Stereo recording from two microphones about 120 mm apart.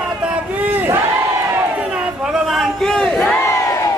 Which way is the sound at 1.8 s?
10° right (ahead or behind).